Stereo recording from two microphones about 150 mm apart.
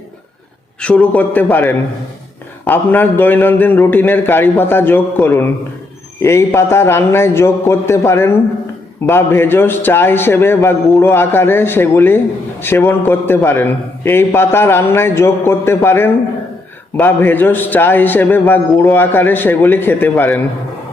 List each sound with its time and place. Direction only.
0.8 s a man's voice: 10° left (ahead or behind)